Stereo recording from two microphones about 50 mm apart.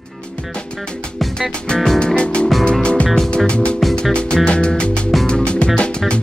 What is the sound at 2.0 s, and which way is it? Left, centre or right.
Music, centre.